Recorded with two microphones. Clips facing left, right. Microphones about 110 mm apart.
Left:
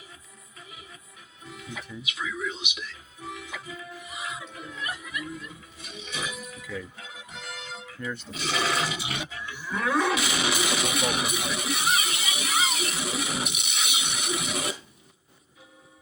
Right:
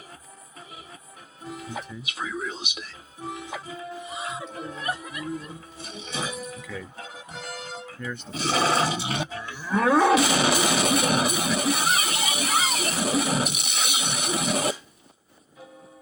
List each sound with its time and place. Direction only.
1.5 s speech: 35° right (ahead or behind)
6.7 s music: 35° right (ahead or behind)
8.0 s speech: centre (ahead or behind)
8.3 s roar: 35° right (ahead or behind)